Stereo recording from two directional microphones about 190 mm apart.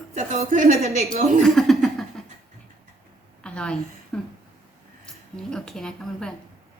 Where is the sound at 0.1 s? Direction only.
35° right (ahead or behind).